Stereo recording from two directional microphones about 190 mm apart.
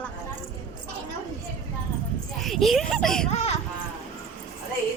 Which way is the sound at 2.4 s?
Centre (ahead or behind).